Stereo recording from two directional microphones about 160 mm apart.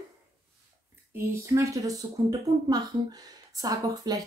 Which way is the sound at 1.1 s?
15° right (ahead or behind).